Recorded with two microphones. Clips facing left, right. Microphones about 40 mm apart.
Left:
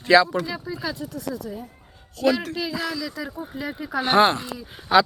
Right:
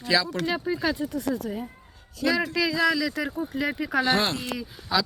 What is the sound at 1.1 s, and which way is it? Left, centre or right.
Speech, right.